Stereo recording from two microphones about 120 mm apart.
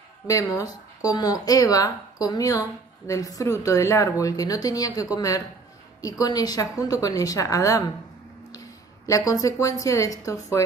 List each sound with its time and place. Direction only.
0.3 s a woman's voice: 25° left (ahead or behind)